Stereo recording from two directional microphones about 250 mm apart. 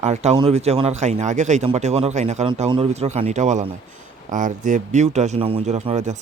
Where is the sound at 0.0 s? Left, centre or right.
Right.